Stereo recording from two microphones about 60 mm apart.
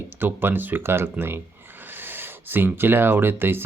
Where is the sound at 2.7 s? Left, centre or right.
Right.